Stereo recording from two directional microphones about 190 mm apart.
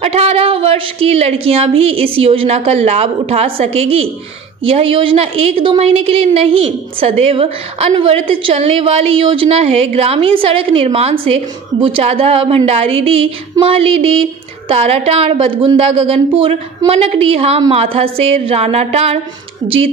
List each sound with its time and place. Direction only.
0.0 s a woman's voice: 30° right (ahead or behind)